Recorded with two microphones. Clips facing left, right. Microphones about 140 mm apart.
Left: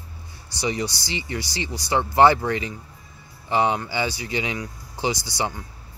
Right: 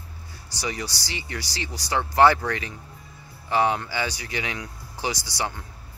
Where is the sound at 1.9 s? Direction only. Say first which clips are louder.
Left 2 dB; 15° left (ahead or behind).